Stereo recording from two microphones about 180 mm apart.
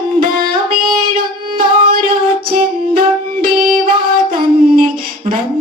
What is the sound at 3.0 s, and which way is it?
Music, 55° right (ahead or behind).